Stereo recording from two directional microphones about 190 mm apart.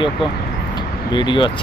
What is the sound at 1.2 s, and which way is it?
Speech, 25° left (ahead or behind).